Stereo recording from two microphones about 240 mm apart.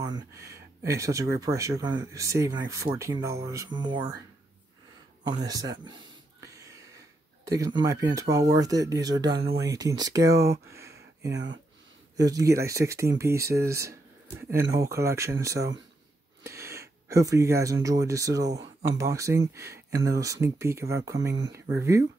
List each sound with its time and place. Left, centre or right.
0.0 s speech: centre
5.2 s speech: centre
7.6 s speech: centre
11.3 s speech: right
12.3 s speech: centre
16.4 s a sound: centre
17.8 s speech: centre